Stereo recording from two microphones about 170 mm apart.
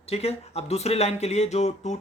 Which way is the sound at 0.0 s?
35° left (ahead or behind).